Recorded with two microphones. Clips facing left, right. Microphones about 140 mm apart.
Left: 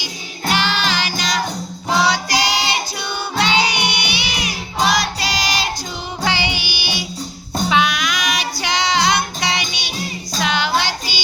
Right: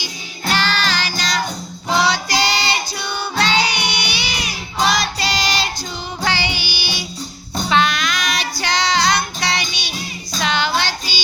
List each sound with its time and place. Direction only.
0.0 s music: 15° left (ahead or behind)
10.4 s child singing: 10° left (ahead or behind)